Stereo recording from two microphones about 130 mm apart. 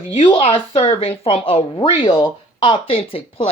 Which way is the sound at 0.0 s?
45° left (ahead or behind).